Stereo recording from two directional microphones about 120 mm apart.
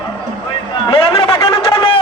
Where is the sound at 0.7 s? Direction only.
45° left (ahead or behind).